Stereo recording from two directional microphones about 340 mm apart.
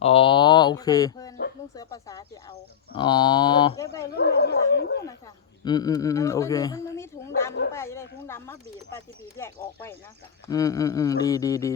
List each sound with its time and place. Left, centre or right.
0.0 s speech: centre
4.1 s speech: left
5.6 s speech: centre
10.4 s speech: centre